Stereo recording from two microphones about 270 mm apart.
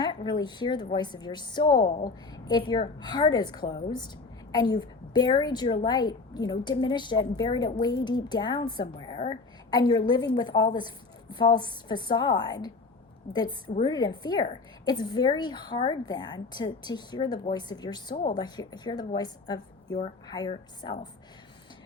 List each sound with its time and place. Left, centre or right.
0.0 s a woman's voice: centre